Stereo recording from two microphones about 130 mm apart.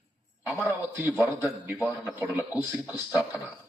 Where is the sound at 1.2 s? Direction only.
20° right (ahead or behind).